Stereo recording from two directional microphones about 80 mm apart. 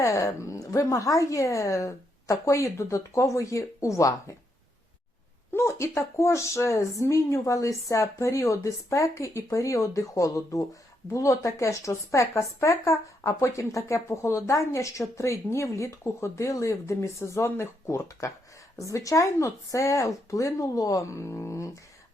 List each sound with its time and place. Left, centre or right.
0.0 s a woman's voice: left
5.5 s a woman's voice: left